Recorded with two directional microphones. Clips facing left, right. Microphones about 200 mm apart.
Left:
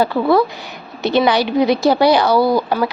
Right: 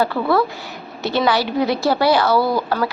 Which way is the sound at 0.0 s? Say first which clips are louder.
Left 3 dB; 15° left (ahead or behind).